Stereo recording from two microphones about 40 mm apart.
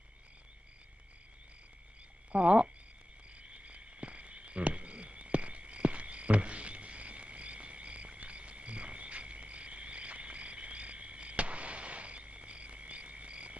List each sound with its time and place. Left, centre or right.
2.3 s speech: right
3.6 s frog: right